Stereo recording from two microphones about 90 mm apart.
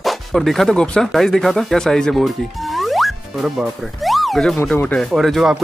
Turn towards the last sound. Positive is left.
turn(degrees=0)  # may be behind; listen again after turning